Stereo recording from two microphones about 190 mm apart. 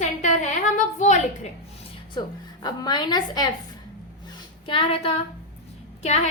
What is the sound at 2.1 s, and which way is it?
A woman's voice, 20° left (ahead or behind).